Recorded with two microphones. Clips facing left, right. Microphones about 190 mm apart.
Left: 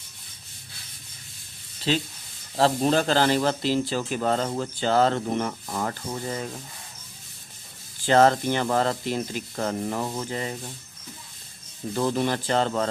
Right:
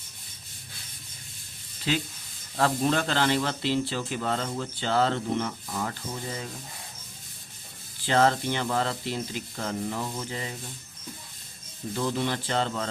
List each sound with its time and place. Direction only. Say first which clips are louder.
1.9 s speech: left 3 dB; 30° left (ahead or behind); by 6.4 s 50° left (ahead or behind)
8.0 s speech: left 4 dB; 45° left (ahead or behind)
11.9 s speech: left 4 dB; 45° left (ahead or behind)